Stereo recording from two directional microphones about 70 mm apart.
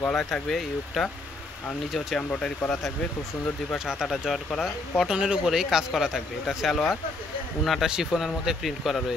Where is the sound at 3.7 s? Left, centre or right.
Centre.